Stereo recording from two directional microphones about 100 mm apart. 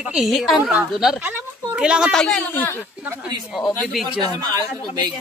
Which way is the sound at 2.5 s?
20° left (ahead or behind).